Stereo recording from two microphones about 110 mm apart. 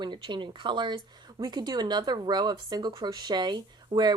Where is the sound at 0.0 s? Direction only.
45° right (ahead or behind).